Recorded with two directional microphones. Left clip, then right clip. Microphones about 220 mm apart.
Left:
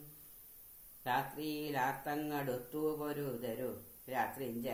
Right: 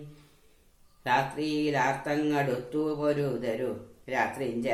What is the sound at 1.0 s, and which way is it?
Mantra, 50° left (ahead or behind).